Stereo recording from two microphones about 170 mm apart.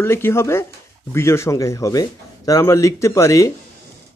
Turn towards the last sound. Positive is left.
turn(degrees=20)  # may be behind; listen again after turning